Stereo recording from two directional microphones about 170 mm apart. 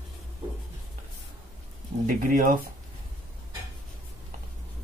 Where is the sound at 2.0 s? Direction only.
55° right (ahead or behind).